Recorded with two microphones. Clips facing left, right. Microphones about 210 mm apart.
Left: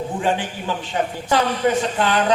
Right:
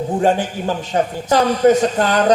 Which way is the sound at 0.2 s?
40° right (ahead or behind).